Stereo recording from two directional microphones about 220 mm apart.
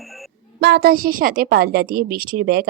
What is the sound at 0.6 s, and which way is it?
A woman's voice, 45° right (ahead or behind).